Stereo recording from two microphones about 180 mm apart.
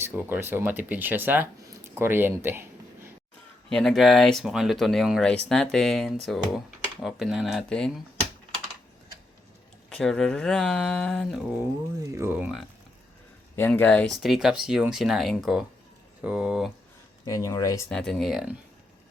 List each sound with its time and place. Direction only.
0.0 s speech: 10° right (ahead or behind)
3.7 s speech: centre (ahead or behind)
9.9 s speech: 5° left (ahead or behind)
13.6 s speech: 10° left (ahead or behind)
17.2 s speech: 20° left (ahead or behind)
17.8 s speech: 5° left (ahead or behind)